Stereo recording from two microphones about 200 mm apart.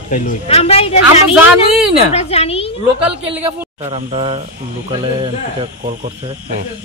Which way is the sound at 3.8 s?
30° right (ahead or behind).